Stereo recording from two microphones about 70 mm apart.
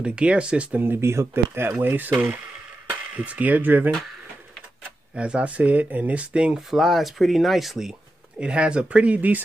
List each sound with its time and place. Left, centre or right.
0.0 s speech: centre
0.7 s speech: right
5.1 s speech: centre
6.7 s speech: centre
8.4 s speech: centre